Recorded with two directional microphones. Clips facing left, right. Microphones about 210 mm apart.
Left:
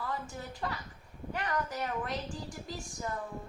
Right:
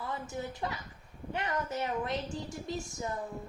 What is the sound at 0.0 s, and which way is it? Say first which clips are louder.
A woman's voice: right 2 dB; 20° right (ahead or behind).